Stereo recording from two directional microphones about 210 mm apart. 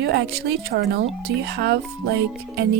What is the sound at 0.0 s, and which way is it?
Music, 50° right (ahead or behind).